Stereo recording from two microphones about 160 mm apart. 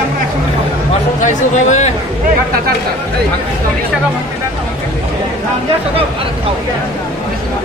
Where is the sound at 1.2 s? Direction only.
50° left (ahead or behind).